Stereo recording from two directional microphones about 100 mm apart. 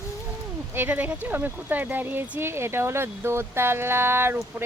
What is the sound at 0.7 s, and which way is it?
Speech, 20° right (ahead or behind).